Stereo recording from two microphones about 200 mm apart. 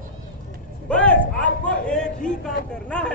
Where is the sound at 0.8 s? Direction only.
5° left (ahead or behind).